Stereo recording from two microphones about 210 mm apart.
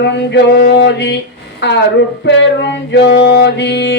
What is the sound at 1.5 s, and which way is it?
Speech, 55° left (ahead or behind).